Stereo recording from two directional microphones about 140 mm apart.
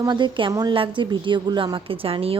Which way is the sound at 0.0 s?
35° right (ahead or behind).